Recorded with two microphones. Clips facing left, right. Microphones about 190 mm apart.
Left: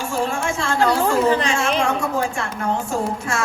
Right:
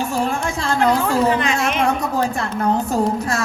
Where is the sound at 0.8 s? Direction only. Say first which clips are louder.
Right 1 dB; 35° left (ahead or behind).